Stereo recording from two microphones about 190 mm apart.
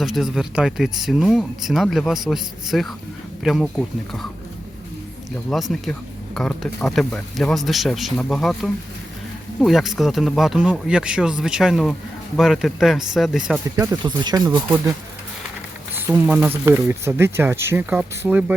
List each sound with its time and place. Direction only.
0.0 s speech: centre (ahead or behind)
5.5 s speech: centre (ahead or behind)
13.7 s speech: 15° right (ahead or behind)
16.0 s speech: 10° right (ahead or behind)